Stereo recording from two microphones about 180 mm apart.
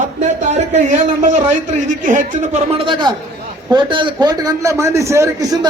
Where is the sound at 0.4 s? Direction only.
40° right (ahead or behind).